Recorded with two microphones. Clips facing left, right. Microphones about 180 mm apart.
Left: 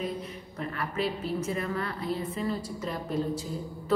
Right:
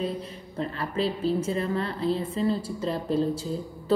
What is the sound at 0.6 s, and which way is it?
A woman's voice, 30° right (ahead or behind).